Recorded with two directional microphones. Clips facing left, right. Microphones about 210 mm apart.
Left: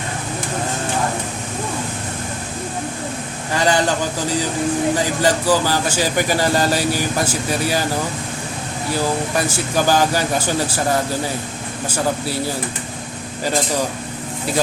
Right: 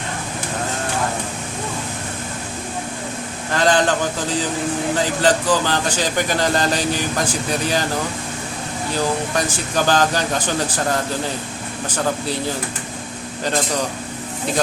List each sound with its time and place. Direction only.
3.5 s speech: 10° left (ahead or behind)
9.3 s speech: 10° left (ahead or behind)